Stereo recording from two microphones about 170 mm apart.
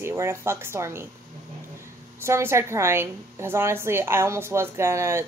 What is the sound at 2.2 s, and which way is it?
A woman's voice, 15° right (ahead or behind).